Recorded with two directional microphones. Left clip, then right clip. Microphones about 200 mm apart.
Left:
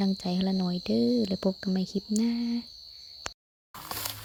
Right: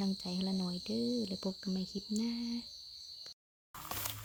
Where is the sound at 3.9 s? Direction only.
50° left (ahead or behind).